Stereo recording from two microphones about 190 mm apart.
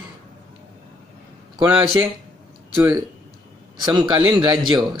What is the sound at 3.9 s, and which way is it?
Speech, 20° right (ahead or behind).